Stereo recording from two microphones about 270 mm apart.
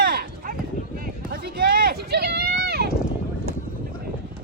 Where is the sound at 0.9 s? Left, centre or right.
Right.